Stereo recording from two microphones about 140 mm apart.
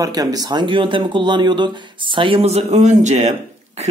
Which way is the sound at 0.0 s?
25° right (ahead or behind).